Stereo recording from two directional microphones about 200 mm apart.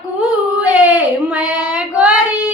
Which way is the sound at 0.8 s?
10° right (ahead or behind).